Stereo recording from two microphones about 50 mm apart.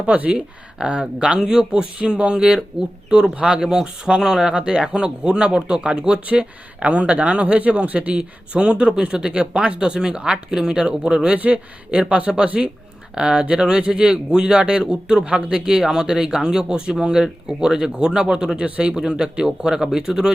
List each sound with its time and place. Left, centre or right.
0.0 s speech: right